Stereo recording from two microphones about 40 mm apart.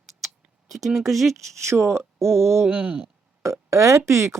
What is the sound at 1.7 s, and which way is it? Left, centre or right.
Speech, right.